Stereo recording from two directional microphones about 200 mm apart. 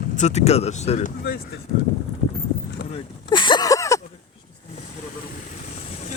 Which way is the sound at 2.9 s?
25° left (ahead or behind).